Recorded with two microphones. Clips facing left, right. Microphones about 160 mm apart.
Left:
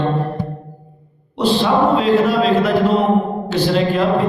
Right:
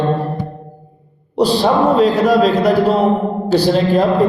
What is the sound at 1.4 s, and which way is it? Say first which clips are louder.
Mantra: right 2 dB; 40° right (ahead or behind).